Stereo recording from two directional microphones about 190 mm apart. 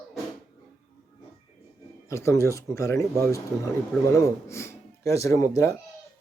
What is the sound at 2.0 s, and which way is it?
Speech, 15° left (ahead or behind).